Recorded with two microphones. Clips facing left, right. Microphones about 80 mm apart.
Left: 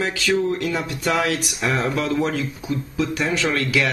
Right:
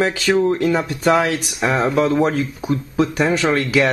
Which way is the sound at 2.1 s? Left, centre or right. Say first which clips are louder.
Right 5 dB; right.